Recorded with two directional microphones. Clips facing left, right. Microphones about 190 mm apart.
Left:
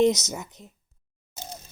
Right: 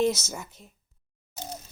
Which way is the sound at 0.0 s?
20° left (ahead or behind).